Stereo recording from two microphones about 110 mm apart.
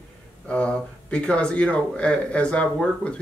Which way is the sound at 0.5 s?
10° left (ahead or behind).